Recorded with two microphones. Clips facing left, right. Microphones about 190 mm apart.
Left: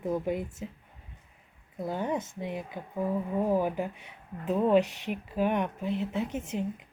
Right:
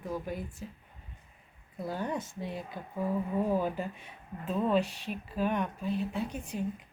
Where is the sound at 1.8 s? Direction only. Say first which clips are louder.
Left 3 dB; 20° left (ahead or behind).